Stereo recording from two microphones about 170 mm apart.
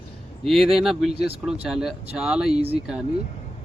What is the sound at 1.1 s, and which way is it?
Speech, 70° left (ahead or behind).